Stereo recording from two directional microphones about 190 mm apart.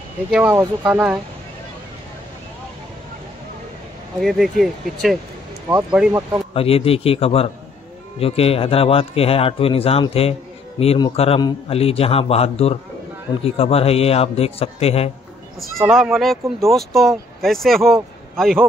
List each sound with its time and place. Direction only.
0.3 s speech: 10° right (ahead or behind)
4.2 s speech: centre (ahead or behind)
6.5 s speech: 30° left (ahead or behind)
15.9 s speech: centre (ahead or behind)